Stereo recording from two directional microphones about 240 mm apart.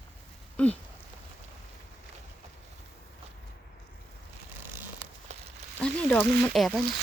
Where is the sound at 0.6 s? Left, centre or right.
Centre.